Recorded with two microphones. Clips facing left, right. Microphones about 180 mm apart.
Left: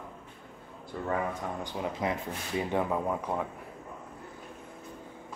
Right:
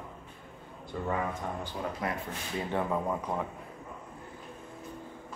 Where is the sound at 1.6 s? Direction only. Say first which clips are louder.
Left 2 dB; 20° left (ahead or behind).